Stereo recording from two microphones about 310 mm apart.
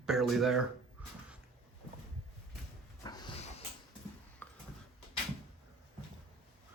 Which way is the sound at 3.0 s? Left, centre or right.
Centre.